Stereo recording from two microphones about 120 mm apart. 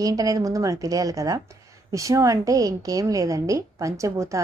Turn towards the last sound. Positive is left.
turn(degrees=-25)  # may be behind; listen again after turning